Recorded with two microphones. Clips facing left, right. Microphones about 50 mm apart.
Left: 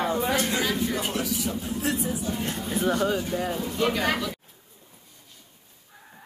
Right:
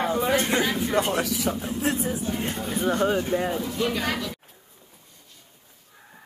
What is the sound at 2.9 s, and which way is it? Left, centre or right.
Speech, right.